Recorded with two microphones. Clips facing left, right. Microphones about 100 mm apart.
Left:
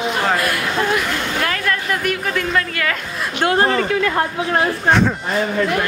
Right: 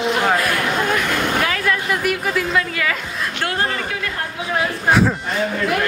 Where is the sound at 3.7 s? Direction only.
50° left (ahead or behind).